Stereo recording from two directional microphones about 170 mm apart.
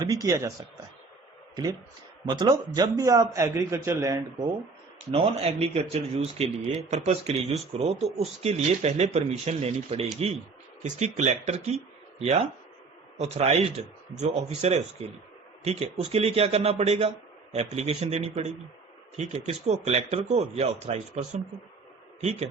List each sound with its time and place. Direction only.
0.0 s a man's voice: 20° right (ahead or behind)
2.2 s a man's voice: 25° right (ahead or behind)
5.1 s speech: 35° right (ahead or behind)